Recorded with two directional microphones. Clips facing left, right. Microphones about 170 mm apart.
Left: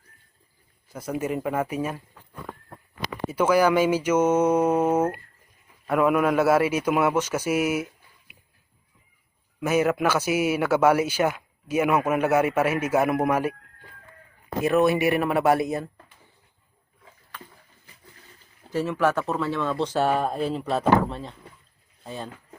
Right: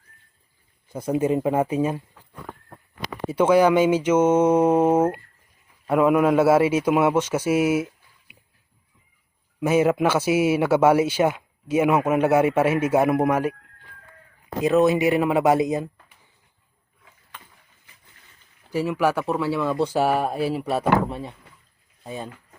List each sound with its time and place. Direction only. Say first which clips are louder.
0.9 s speech: right 6 dB; 30° right (ahead or behind)
3.2 s speech: right 3 dB; 25° right (ahead or behind)
9.6 s speech: right 3 dB; 25° right (ahead or behind)
14.6 s speech: right 2 dB; 20° right (ahead or behind)
18.7 s speech: right 1 dB; 10° right (ahead or behind)